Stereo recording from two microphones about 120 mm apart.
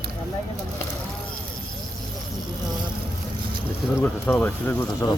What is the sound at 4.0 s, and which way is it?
Speech, 10° left (ahead or behind).